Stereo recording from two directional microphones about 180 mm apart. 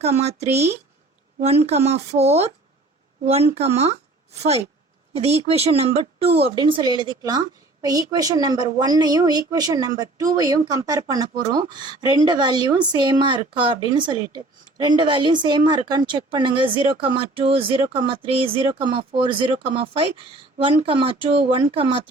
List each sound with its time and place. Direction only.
0.0 s a woman's voice: 35° right (ahead or behind)